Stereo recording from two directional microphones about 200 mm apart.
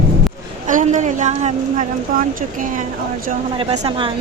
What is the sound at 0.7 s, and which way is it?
A woman's voice, 40° right (ahead or behind).